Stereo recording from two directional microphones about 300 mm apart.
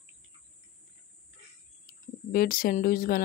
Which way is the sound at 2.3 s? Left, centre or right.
Left.